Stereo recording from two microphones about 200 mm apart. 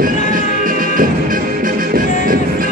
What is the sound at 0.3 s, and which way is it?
Music, 45° right (ahead or behind).